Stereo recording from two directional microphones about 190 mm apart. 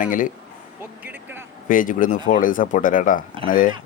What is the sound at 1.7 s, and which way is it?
Speech, 45° left (ahead or behind).